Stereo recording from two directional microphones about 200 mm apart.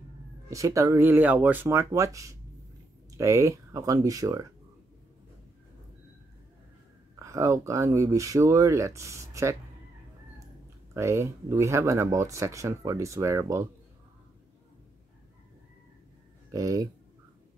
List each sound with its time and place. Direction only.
0.5 s speech: 15° right (ahead or behind)
7.2 s speech: 15° right (ahead or behind)
11.0 s speech: 15° right (ahead or behind)
16.5 s speech: 15° right (ahead or behind)